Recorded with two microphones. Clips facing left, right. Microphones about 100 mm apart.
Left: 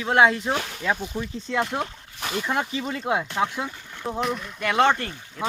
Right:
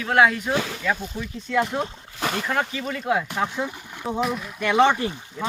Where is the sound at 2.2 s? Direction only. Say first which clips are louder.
Right 3 dB; 90° right.